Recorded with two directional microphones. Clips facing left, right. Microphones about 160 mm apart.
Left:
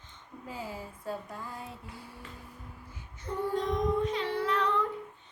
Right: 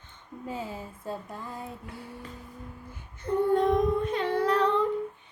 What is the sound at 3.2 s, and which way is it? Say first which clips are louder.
Child singing: right 8 dB; 55° right (ahead or behind).